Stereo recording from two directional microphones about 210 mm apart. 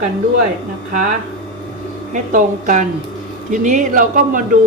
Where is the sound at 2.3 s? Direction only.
40° right (ahead or behind).